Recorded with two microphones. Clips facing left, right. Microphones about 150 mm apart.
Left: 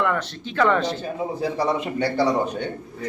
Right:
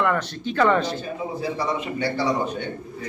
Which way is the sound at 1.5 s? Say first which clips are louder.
Left 3 dB; 45° left (ahead or behind).